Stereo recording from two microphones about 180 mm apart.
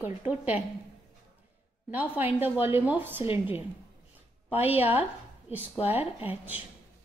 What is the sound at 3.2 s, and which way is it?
Speech, 30° left (ahead or behind).